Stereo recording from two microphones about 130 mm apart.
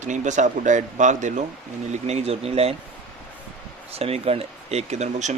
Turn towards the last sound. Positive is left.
turn(degrees=-60)  # may be behind; listen again after turning